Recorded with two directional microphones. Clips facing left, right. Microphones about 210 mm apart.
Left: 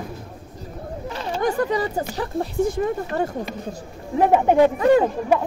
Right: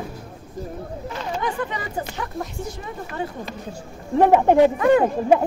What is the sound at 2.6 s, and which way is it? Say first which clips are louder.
Speech: left 10 dB; 50° left (ahead or behind).